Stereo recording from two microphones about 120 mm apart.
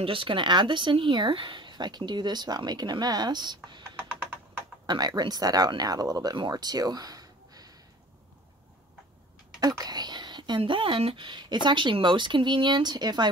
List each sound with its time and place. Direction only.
0.0 s speech: 45° right (ahead or behind)
4.8 s speech: 35° right (ahead or behind)
9.6 s a sound: 35° right (ahead or behind)
10.6 s speech: 45° right (ahead or behind)